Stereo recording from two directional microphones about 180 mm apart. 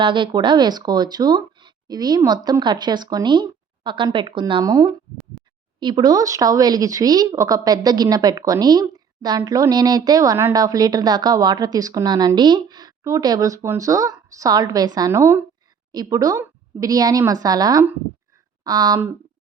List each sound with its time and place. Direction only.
0.0 s a woman's voice: 25° right (ahead or behind)